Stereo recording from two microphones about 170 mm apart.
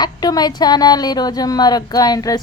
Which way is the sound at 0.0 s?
25° left (ahead or behind).